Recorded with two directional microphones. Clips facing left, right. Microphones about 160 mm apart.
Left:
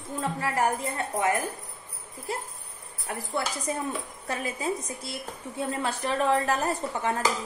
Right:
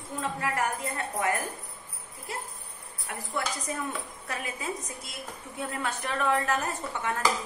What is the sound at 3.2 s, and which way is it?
Speech, 30° left (ahead or behind).